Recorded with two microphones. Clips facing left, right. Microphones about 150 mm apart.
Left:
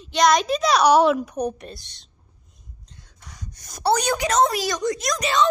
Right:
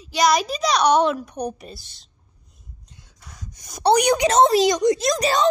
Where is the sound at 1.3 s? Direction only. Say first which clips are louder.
Left 2 dB; centre (ahead or behind).